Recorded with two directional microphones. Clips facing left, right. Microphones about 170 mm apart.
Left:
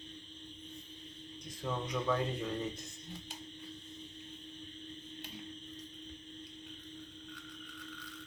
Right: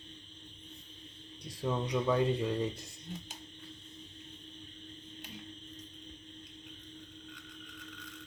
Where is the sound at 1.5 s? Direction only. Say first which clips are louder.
Right 5 dB; 30° right (ahead or behind).